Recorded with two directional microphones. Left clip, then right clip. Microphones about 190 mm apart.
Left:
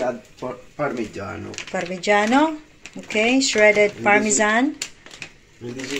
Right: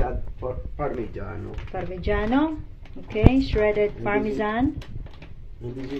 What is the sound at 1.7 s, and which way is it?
Speech, 25° left (ahead or behind).